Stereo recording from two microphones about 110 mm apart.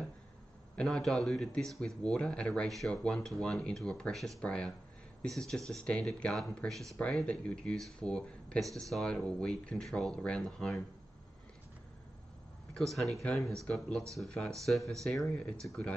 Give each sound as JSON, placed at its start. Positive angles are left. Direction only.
{"t": 0.7, "sound": "speech", "side_deg": 5}
{"t": 12.9, "sound": "speech", "side_deg": 0}